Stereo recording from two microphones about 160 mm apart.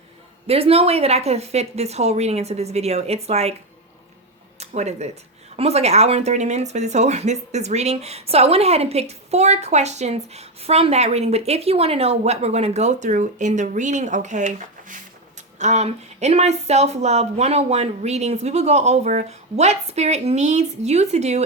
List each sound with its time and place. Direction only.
0.4 s a woman's voice: 40° right (ahead or behind)
4.6 s speech: 45° right (ahead or behind)